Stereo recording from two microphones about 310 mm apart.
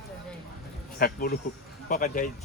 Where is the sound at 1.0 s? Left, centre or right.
Left.